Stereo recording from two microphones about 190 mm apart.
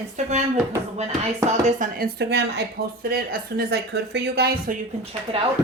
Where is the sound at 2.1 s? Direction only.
60° right (ahead or behind).